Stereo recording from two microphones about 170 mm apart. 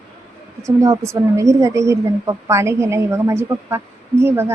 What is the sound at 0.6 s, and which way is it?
A woman's voice, 20° right (ahead or behind).